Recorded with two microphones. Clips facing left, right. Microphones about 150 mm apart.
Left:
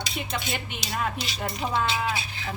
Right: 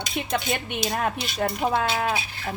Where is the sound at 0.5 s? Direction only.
55° right (ahead or behind).